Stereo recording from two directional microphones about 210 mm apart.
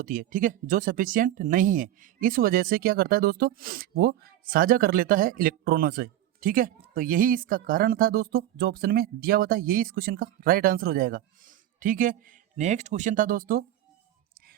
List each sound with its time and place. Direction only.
0.0 s speech: 40° right (ahead or behind)